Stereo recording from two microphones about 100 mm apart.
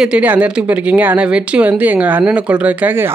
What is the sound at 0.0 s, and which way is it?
Speech, 15° right (ahead or behind).